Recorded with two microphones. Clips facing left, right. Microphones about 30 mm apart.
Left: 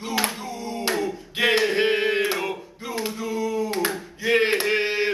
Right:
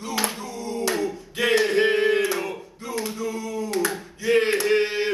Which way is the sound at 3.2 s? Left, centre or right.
Centre.